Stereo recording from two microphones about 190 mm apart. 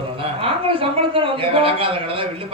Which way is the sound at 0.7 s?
30° right (ahead or behind).